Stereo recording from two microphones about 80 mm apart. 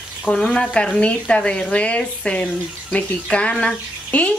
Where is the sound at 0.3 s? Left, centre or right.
Centre.